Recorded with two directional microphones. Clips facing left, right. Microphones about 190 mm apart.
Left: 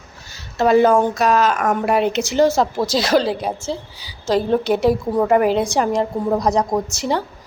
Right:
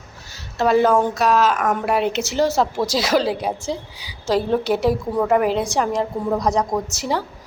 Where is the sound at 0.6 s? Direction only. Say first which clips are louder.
Left 2 dB; centre (ahead or behind).